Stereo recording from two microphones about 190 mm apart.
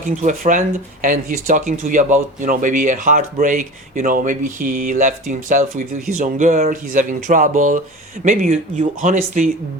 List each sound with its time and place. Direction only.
0.2 s speech: 40° right (ahead or behind)